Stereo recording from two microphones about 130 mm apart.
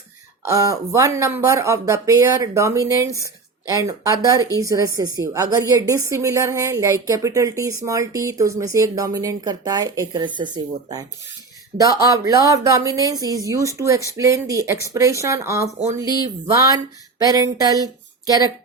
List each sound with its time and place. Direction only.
0.4 s speech: 25° right (ahead or behind)